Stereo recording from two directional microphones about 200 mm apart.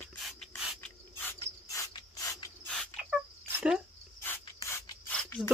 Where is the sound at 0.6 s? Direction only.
Centre (ahead or behind).